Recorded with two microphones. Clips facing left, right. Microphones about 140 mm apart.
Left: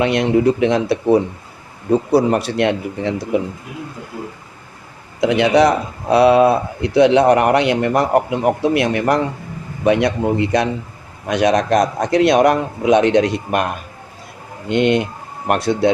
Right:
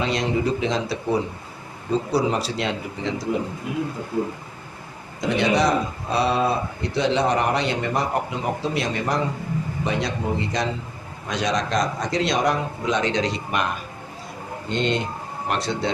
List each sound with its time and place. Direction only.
0.0 s speech: 65° left (ahead or behind)
5.2 s speech: 65° left (ahead or behind)
14.7 s speech: 65° left (ahead or behind)